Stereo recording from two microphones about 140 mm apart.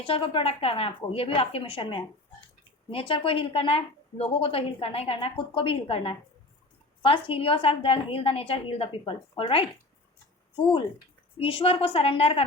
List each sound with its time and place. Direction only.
0.0 s a woman's voice: 40° left (ahead or behind)